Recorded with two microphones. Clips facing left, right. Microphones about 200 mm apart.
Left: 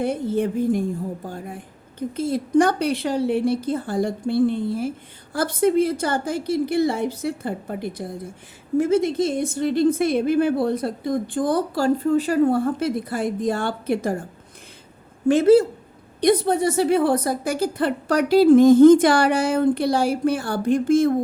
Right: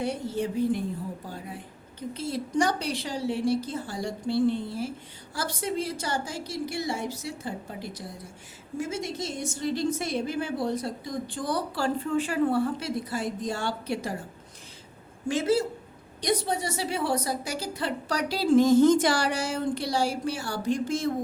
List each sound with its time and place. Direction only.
0.0 s a woman's voice: 50° left (ahead or behind)
15.3 s a woman's voice: 55° left (ahead or behind)